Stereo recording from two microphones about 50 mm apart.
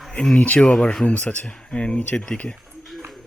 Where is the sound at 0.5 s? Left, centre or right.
Centre.